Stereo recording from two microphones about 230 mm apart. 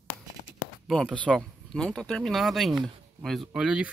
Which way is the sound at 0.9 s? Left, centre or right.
Centre.